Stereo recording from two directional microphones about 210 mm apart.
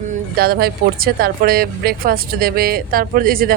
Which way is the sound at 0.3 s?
45° right (ahead or behind).